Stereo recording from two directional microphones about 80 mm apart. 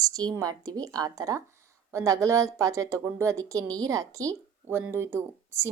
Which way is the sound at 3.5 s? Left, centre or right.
Right.